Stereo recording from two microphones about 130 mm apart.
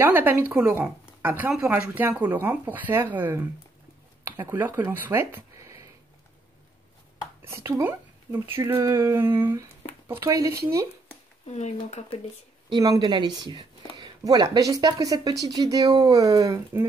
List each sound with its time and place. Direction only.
0.0 s speech: 15° right (ahead or behind)
7.4 s speech: 20° right (ahead or behind)
11.4 s speech: 60° left (ahead or behind)
12.6 s speech: 35° right (ahead or behind)